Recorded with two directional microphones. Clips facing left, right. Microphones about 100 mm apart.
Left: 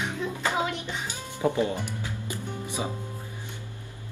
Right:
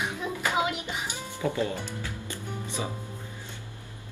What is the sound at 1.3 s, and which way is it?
Music, 20° left (ahead or behind).